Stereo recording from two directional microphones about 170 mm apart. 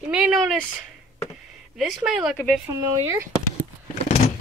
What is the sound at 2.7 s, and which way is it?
Speech, 20° right (ahead or behind).